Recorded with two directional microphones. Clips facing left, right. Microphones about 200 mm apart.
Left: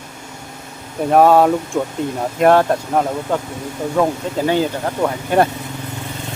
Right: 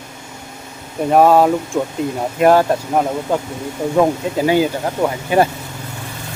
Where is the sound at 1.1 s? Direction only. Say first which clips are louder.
Even; centre (ahead or behind).